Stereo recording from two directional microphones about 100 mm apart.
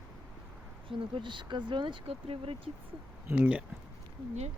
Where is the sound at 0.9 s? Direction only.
55° right (ahead or behind).